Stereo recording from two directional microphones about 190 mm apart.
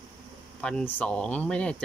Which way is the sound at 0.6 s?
5° left (ahead or behind).